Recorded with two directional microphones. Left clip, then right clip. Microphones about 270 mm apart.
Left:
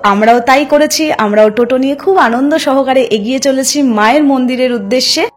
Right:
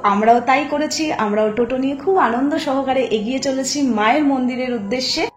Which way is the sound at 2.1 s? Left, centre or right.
Left.